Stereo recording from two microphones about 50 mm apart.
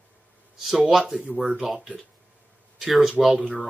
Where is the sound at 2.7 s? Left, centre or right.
Centre.